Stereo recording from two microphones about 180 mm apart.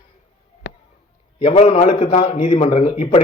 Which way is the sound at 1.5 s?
35° left (ahead or behind).